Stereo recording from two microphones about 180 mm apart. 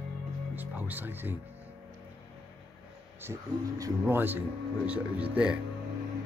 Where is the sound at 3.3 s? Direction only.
20° right (ahead or behind).